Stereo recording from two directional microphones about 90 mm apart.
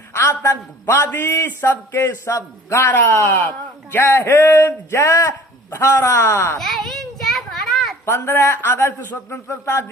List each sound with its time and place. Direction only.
0.1 s a man's voice: 25° left (ahead or behind)
6.6 s a sound: 5° left (ahead or behind)
8.0 s a man's voice: 25° left (ahead or behind)